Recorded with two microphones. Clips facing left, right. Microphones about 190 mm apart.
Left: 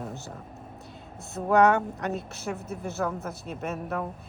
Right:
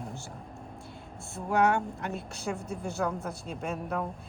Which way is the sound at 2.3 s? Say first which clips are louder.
Left 1 dB; 5° left (ahead or behind).